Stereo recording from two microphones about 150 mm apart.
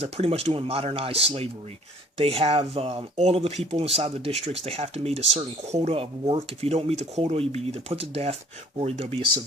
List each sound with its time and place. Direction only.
0.0 s speech: 40° right (ahead or behind)